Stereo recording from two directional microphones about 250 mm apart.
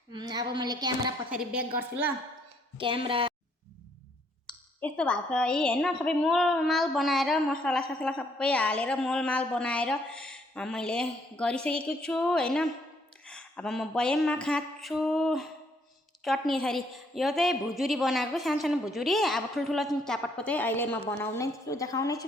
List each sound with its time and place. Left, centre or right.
0.1 s a woman's voice: centre
2.7 s speech: right
4.8 s a woman's voice: centre